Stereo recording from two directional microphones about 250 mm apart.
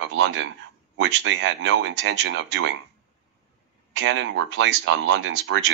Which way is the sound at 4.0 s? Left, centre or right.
Right.